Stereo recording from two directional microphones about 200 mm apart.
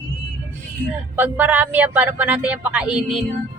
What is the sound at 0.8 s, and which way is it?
A woman's voice, 5° right (ahead or behind).